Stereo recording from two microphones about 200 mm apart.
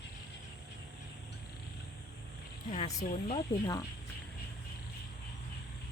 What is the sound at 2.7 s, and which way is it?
Speech, 30° left (ahead or behind).